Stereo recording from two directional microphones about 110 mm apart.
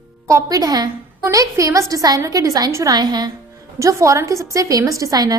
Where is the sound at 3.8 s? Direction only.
30° right (ahead or behind).